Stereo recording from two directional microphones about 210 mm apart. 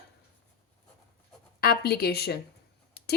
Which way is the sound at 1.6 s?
45° left (ahead or behind).